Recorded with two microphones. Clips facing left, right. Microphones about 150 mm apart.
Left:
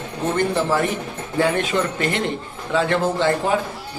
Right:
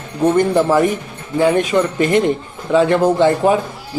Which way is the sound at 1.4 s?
15° right (ahead or behind).